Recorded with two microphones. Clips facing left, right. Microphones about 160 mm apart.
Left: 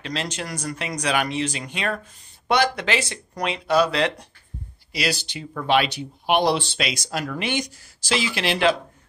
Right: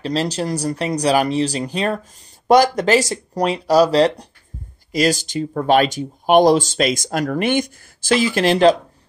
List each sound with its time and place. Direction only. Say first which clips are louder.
0.0 s speech: right 9 dB; 35° right (ahead or behind)